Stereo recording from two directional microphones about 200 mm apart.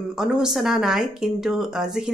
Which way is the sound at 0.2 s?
5° right (ahead or behind).